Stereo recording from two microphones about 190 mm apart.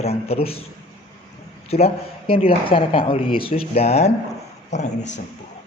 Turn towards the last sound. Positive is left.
turn(degrees=35)  # may be behind; listen again after turning